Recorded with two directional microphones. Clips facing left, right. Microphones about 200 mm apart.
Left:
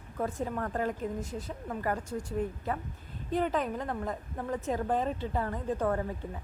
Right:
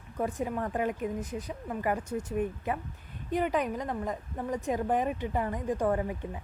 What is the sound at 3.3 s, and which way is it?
A woman's voice, 15° right (ahead or behind).